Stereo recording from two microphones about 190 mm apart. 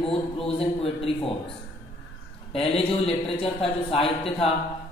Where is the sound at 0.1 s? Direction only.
30° left (ahead or behind).